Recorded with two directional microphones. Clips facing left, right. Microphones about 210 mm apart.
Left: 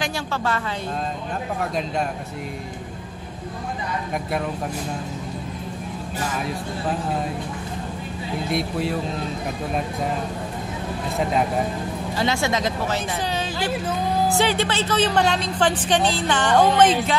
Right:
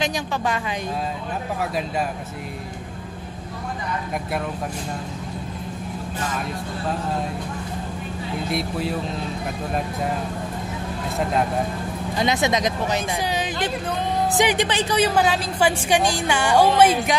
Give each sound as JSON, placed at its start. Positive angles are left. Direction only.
{"t": 0.0, "sound": "a woman's voice", "side_deg": -15}
{"t": 1.6, "sound": "a man's voice", "side_deg": -5}
{"t": 6.1, "sound": "speech", "side_deg": 10}
{"t": 8.5, "sound": "a man's voice", "side_deg": 0}
{"t": 12.2, "sound": "a woman's voice", "side_deg": -20}